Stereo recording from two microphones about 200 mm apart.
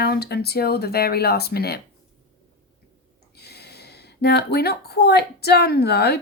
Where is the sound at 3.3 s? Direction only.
55° left (ahead or behind).